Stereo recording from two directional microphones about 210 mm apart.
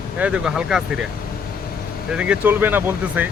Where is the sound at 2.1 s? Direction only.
5° right (ahead or behind).